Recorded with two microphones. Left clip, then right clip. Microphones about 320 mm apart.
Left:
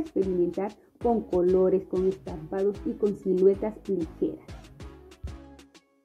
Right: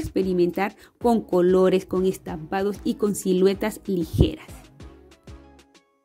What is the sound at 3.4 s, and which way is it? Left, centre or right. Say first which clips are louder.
Speech: even; right.